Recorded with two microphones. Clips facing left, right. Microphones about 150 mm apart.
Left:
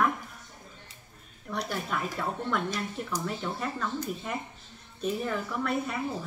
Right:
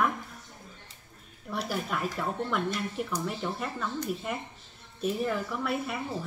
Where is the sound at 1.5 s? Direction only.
5° right (ahead or behind).